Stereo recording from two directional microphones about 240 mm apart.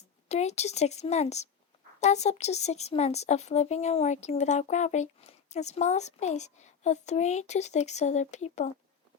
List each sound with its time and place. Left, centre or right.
0.3 s speech: left